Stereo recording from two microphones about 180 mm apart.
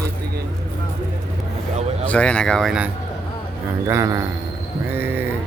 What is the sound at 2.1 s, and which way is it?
Speech, 5° left (ahead or behind).